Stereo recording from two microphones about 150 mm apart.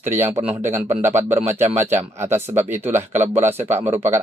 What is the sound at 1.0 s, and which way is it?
Speech, 15° right (ahead or behind).